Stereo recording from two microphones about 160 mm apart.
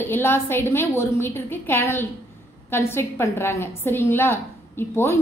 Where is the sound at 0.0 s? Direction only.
15° left (ahead or behind).